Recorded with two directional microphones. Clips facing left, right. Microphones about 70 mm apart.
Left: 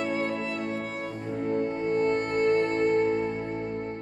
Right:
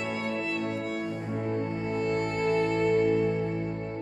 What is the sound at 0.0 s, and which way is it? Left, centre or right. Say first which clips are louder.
Music: left 3 dB; left.